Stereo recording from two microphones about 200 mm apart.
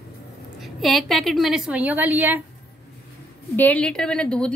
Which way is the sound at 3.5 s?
10° left (ahead or behind).